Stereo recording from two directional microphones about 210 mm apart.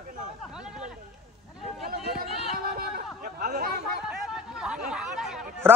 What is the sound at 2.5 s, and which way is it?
Chatter, 45° right (ahead or behind).